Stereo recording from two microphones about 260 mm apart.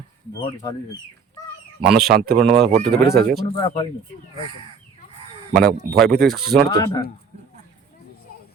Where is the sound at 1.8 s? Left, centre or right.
Centre.